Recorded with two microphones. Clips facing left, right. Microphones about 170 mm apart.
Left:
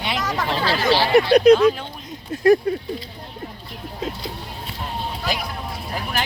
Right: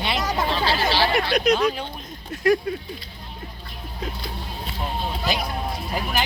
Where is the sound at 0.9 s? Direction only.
35° left (ahead or behind).